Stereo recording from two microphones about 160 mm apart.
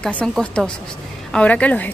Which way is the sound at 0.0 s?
10° left (ahead or behind).